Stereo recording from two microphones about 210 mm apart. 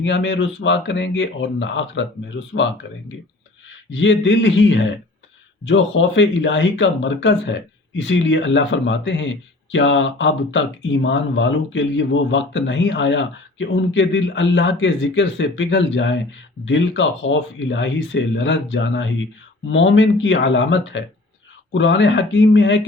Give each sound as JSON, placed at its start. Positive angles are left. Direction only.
{"t": 0.0, "sound": "speech", "side_deg": 60}